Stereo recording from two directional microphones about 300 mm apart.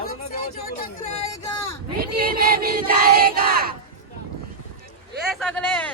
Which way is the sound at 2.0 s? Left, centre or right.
Right.